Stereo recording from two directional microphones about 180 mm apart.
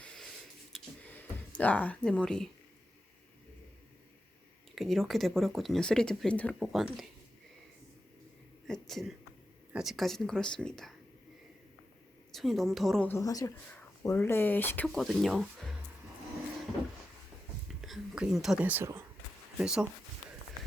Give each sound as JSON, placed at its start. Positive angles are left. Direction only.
{"t": 0.0, "sound": "a sound", "side_deg": 5}
{"t": 4.7, "sound": "speech", "side_deg": 0}
{"t": 8.6, "sound": "a sound", "side_deg": 0}
{"t": 9.7, "sound": "speech", "side_deg": 0}
{"t": 12.3, "sound": "speech", "side_deg": 0}
{"t": 14.8, "sound": "speech", "side_deg": 0}
{"t": 17.7, "sound": "speech", "side_deg": 0}